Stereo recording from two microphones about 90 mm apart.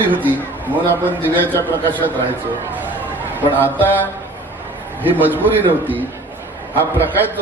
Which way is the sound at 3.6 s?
20° left (ahead or behind).